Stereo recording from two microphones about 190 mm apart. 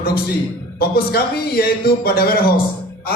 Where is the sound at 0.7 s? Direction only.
55° left (ahead or behind).